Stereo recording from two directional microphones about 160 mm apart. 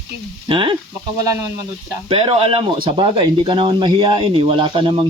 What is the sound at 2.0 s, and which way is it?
Speech, 35° right (ahead or behind).